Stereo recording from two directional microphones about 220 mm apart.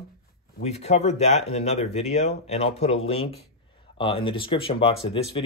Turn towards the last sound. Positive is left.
turn(degrees=25)  # may be behind; listen again after turning